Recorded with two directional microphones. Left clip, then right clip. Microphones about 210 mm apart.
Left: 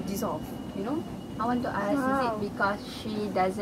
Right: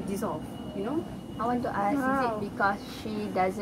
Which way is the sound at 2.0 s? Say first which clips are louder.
Even; 10° left (ahead or behind).